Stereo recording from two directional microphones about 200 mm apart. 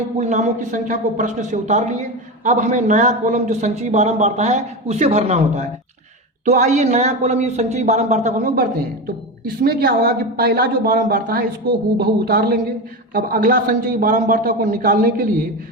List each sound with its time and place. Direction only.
0.2 s a man's voice: 35° right (ahead or behind)